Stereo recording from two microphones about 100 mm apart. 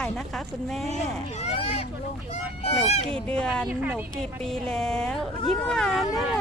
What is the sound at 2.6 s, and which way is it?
Speech, 90° left.